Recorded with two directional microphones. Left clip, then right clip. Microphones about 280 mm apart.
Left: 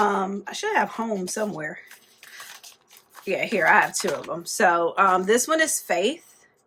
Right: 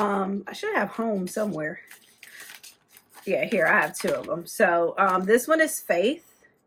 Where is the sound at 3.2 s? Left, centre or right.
Centre.